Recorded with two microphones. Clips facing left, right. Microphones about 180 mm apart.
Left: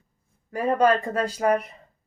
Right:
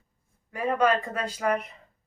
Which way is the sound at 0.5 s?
40° left (ahead or behind).